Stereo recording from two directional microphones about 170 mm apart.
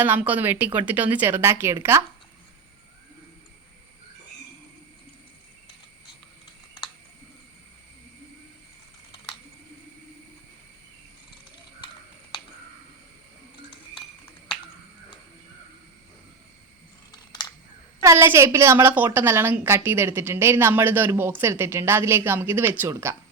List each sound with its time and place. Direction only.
0.0 s a woman's voice: 10° right (ahead or behind)
18.0 s a woman's voice: 15° right (ahead or behind)